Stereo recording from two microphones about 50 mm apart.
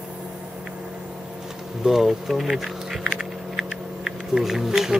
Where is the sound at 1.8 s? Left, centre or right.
Centre.